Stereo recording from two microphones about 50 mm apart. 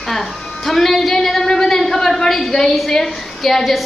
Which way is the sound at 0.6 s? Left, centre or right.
Centre.